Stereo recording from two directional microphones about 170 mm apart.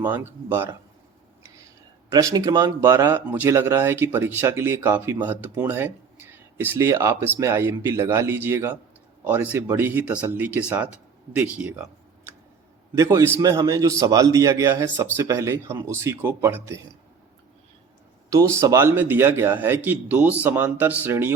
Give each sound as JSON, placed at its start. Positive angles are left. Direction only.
{"t": 0.0, "sound": "speech", "side_deg": -10}
{"t": 2.0, "sound": "a man's voice", "side_deg": -20}
{"t": 18.3, "sound": "speech", "side_deg": -15}